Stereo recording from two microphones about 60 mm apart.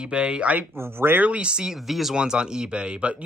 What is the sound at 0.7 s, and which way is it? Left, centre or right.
Speech, right.